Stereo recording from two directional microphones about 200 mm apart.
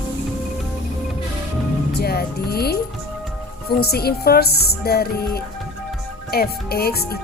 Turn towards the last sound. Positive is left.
turn(degrees=50)  # may be behind; listen again after turning